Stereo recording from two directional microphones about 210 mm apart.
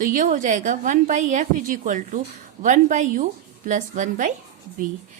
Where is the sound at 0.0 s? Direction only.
40° right (ahead or behind).